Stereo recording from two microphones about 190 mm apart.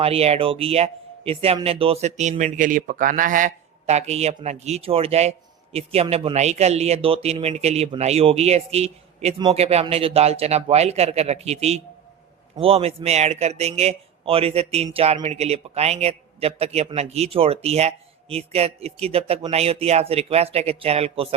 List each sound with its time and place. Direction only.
0.0 s a man's voice: 30° right (ahead or behind)